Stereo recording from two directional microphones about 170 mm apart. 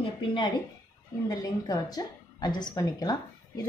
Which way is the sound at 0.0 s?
30° left (ahead or behind).